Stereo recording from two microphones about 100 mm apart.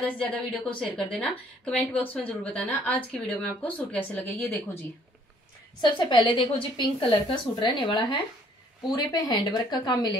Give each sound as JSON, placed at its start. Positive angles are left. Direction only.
{"t": 0.0, "sound": "speech", "side_deg": 15}
{"t": 5.8, "sound": "a woman's voice", "side_deg": 50}
{"t": 7.0, "sound": "a woman's voice", "side_deg": 55}
{"t": 8.8, "sound": "a woman's voice", "side_deg": 45}